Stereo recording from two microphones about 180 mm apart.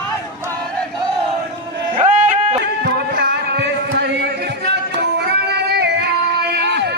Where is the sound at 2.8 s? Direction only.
55° right (ahead or behind).